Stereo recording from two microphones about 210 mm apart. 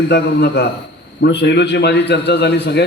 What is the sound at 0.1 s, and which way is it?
A man's voice, 55° left (ahead or behind).